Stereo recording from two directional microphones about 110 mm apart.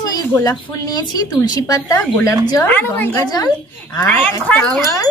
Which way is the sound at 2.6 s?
15° left (ahead or behind).